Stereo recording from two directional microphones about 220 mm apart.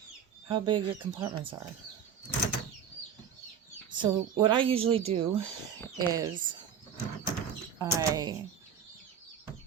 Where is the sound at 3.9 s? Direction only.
20° right (ahead or behind).